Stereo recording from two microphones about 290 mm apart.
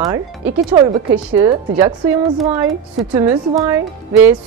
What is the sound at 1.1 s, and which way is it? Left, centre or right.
Speech, centre.